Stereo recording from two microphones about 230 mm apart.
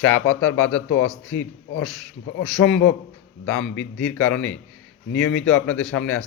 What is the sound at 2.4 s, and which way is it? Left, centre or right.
Speech, centre.